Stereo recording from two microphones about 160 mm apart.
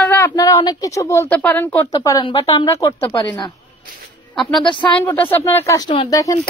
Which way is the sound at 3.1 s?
30° left (ahead or behind).